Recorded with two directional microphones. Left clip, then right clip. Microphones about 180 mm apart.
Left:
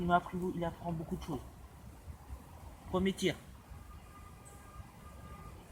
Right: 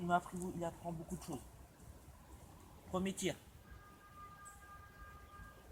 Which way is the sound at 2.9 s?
55° right (ahead or behind).